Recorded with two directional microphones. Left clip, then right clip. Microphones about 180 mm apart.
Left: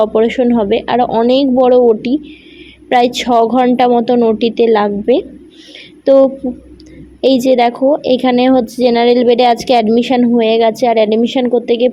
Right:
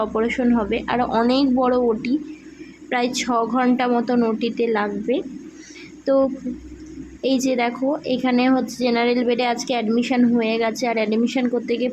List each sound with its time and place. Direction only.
0.0 s a woman's voice: 20° left (ahead or behind)